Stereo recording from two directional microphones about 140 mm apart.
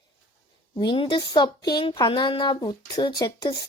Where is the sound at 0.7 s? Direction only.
35° left (ahead or behind).